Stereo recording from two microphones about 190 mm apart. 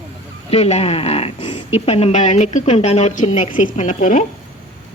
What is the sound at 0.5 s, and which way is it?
A woman's voice, 35° left (ahead or behind).